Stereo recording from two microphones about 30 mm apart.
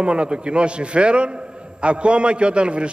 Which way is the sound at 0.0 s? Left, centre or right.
Right.